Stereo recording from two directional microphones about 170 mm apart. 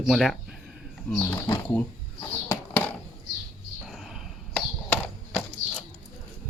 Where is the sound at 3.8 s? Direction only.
Centre (ahead or behind).